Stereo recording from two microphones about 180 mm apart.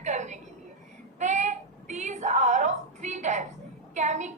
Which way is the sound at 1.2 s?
40° right (ahead or behind).